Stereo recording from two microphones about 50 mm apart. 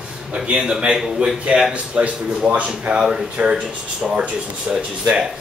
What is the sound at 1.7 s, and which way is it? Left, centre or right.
Speech, right.